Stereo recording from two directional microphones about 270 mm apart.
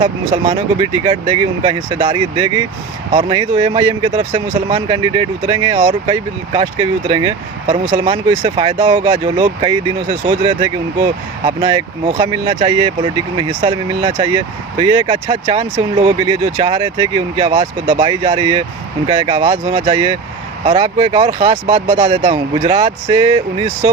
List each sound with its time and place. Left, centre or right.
0.0 s speech: centre